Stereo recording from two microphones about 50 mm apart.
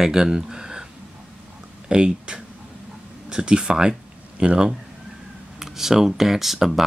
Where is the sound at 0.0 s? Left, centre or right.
Centre.